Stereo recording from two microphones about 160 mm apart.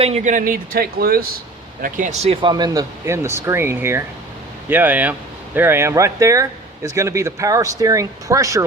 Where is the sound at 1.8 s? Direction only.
55° right (ahead or behind).